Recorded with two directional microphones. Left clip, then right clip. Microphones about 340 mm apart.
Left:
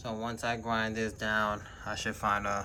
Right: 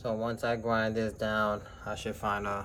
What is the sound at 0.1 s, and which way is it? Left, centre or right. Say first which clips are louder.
Speech: right 3 dB; centre.